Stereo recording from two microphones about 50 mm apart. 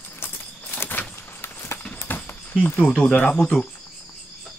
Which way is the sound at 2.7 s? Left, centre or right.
Left.